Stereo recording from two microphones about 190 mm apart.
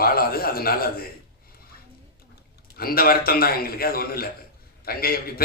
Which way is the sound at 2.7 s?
50° left (ahead or behind).